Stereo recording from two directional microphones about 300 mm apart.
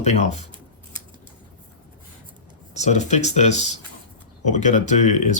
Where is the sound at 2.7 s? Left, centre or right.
Left.